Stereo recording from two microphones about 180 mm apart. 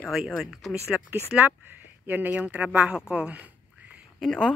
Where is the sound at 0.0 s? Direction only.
Centre (ahead or behind).